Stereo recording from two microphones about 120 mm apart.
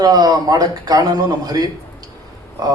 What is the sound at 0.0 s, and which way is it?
A man's voice, 30° right (ahead or behind).